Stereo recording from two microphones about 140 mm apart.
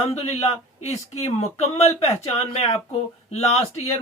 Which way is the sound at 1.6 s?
50° left (ahead or behind).